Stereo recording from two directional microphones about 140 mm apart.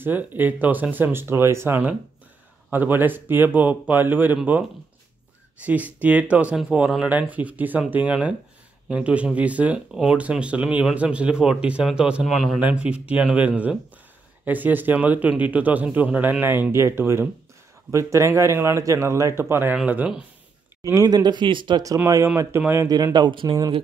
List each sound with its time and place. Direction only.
0.0 s speech: 15° right (ahead or behind)
5.6 s a man's voice: 10° right (ahead or behind)
20.9 s a man's voice: 25° right (ahead or behind)